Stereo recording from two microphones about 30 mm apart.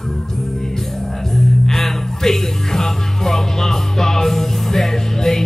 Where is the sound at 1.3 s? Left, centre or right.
Centre.